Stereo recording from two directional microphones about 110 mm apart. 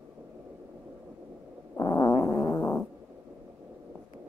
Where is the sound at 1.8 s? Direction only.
35° left (ahead or behind).